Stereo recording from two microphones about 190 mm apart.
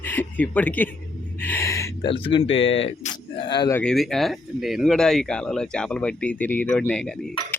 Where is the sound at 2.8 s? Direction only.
40° left (ahead or behind).